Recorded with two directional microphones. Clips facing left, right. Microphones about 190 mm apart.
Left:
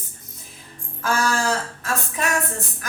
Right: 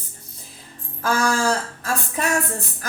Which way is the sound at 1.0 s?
35° right (ahead or behind).